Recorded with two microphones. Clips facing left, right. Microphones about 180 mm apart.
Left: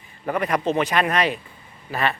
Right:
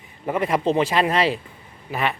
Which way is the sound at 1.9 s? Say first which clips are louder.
Even; 15° right (ahead or behind).